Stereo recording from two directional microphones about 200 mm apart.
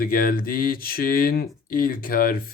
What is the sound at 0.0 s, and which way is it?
Speech, 45° left (ahead or behind).